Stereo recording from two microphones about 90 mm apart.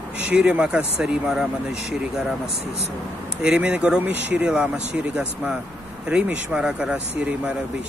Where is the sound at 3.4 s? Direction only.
10° right (ahead or behind).